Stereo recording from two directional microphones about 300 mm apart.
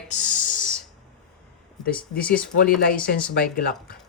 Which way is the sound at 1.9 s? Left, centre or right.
Centre.